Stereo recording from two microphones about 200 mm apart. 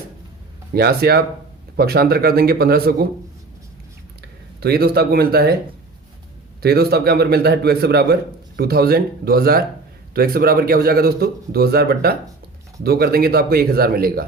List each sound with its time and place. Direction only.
0.7 s a man's voice: 50° right (ahead or behind)
4.6 s a man's voice: 50° right (ahead or behind)
6.6 s a man's voice: 50° right (ahead or behind)